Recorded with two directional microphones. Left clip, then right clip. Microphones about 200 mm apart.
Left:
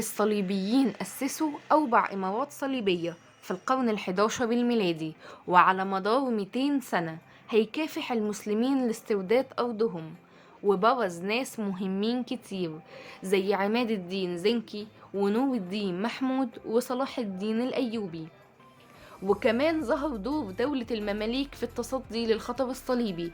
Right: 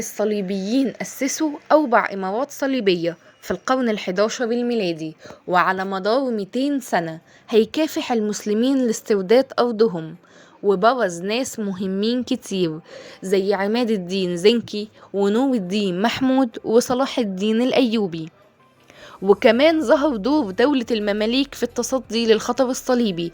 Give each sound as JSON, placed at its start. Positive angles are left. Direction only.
{"t": 0.0, "sound": "a woman's voice", "side_deg": -5}